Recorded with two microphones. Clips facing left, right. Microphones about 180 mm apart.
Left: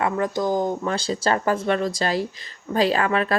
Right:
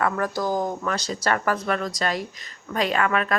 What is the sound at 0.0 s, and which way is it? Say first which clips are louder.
Speech: left 2 dB; 20° left (ahead or behind).